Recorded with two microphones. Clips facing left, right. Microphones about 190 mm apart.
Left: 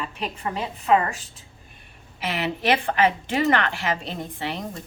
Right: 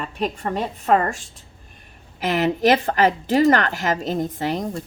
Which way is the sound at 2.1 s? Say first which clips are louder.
Right 7 dB; 45° right (ahead or behind).